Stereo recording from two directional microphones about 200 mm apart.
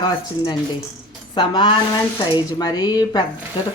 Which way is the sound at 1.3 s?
25° left (ahead or behind).